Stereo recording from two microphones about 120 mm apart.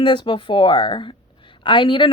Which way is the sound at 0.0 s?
45° left (ahead or behind).